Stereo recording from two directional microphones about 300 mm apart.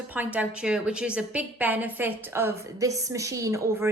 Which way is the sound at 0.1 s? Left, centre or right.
Centre.